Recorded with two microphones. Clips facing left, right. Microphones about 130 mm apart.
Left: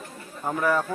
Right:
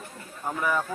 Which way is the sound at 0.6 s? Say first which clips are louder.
Left 3 dB; 5° left (ahead or behind).